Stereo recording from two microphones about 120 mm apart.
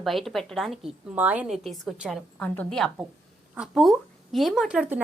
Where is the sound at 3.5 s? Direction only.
Centre (ahead or behind).